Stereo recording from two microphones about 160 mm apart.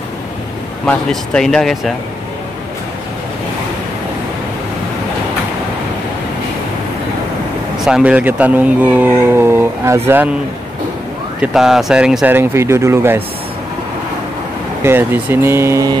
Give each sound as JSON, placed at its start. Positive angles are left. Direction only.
{"t": 0.8, "sound": "speech", "side_deg": 5}
{"t": 7.8, "sound": "speech", "side_deg": -5}
{"t": 11.4, "sound": "speech", "side_deg": -5}
{"t": 14.8, "sound": "speech", "side_deg": -15}